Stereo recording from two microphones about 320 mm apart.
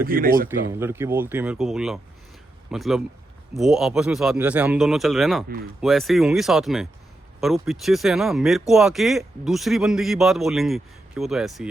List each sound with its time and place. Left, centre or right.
0.0 s speech: right
0.7 s speech: centre